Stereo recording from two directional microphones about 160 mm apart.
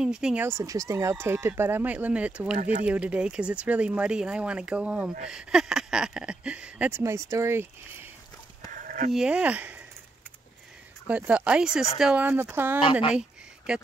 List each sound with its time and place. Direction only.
0.0 s speech: 5° right (ahead or behind)
0.5 s speech: 20° right (ahead or behind)
2.5 s speech: 60° right (ahead or behind)
2.8 s speech: 10° right (ahead or behind)
8.7 s a sound: 55° right (ahead or behind)
9.1 s speech: 5° right (ahead or behind)
11.1 s speech: 10° right (ahead or behind)